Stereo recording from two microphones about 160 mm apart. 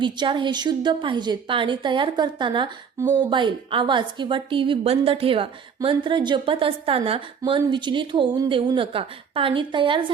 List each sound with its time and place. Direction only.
0.0 s a woman's voice: 30° right (ahead or behind)